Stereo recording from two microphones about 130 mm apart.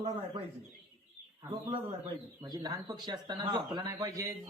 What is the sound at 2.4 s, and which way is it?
Speech, 30° right (ahead or behind).